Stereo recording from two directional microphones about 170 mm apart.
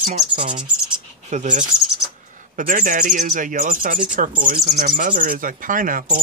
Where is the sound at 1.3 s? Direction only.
45° right (ahead or behind).